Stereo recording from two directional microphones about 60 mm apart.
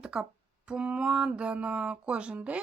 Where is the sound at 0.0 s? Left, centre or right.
Centre.